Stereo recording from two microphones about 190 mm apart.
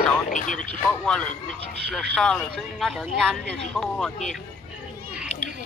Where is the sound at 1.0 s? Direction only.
5° left (ahead or behind).